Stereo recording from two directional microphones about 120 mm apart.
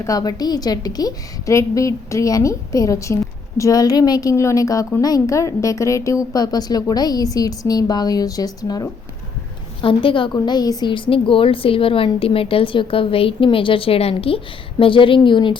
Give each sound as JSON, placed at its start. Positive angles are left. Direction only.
{"t": 0.0, "sound": "a woman's voice", "side_deg": 30}
{"t": 9.8, "sound": "a woman's voice", "side_deg": 45}